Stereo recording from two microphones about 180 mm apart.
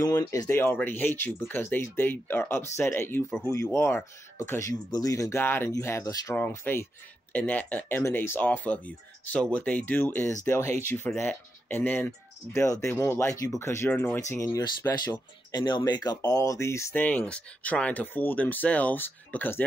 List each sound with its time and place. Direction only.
0.0 s speech: 20° left (ahead or behind)